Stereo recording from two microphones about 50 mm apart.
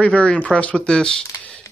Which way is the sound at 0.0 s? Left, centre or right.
Left.